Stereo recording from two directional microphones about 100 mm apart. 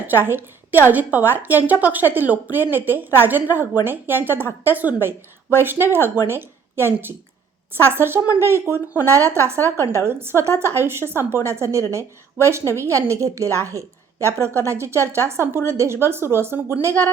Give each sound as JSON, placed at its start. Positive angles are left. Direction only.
{"t": 0.1, "sound": "a woman's voice", "side_deg": -20}